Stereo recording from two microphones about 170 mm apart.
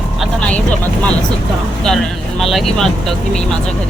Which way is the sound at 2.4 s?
Centre (ahead or behind).